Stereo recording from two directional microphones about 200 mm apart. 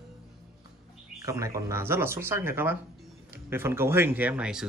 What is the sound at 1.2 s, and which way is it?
Speech, 15° right (ahead or behind).